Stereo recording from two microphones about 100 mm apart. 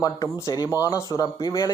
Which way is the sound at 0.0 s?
35° left (ahead or behind).